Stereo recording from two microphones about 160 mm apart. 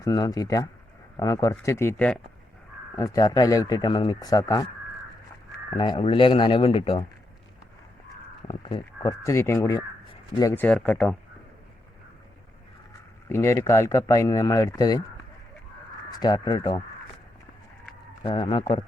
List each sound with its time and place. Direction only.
0.0 s speech: 25° left (ahead or behind)
5.7 s speech: 30° left (ahead or behind)
8.4 s speech: 30° left (ahead or behind)
9.2 s speech: 15° left (ahead or behind)
13.2 s speech: 15° left (ahead or behind)
16.0 s speech: 25° left (ahead or behind)
18.2 s speech: 30° left (ahead or behind)